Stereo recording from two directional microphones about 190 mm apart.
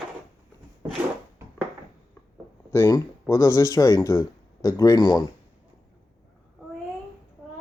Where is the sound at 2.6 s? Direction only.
15° left (ahead or behind).